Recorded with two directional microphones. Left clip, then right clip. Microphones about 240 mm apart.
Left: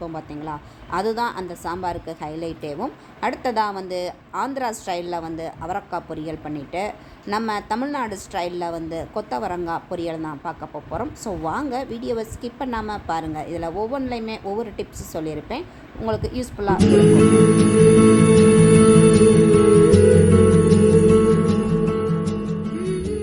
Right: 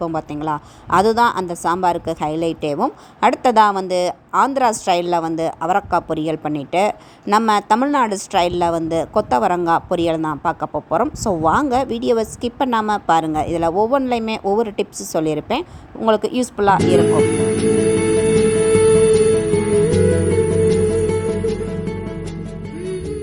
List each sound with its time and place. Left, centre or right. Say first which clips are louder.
0.0 s a woman's voice: right 9 dB; right
16.8 s music: right 1 dB; centre